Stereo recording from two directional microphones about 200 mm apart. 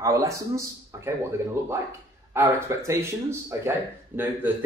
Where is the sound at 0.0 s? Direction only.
15° right (ahead or behind).